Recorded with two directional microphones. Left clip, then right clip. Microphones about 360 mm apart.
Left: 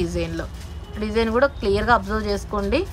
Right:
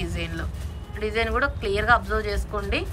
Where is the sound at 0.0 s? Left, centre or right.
Centre.